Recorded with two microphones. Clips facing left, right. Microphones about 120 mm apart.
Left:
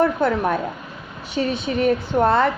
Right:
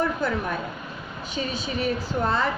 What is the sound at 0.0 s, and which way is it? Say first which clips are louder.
A woman's voice: left 7 dB; 60° left (ahead or behind).